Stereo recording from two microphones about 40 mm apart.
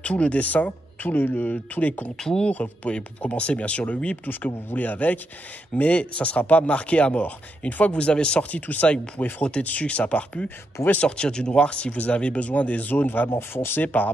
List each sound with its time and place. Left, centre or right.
0.0 s speech: left
2.1 s speech: centre
2.5 s speech: left
3.3 s speech: left
8.5 s speech: left; by 11.5 s centre
11.5 s speech: left
13.3 s speech: left